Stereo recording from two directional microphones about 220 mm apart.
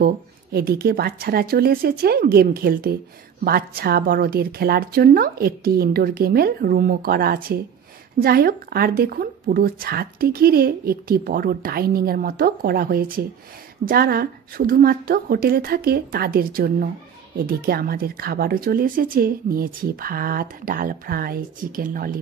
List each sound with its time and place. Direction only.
0.0 s a woman's voice: 45° right (ahead or behind)